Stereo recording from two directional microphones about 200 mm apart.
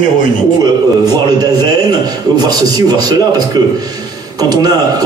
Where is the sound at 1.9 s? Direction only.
20° right (ahead or behind).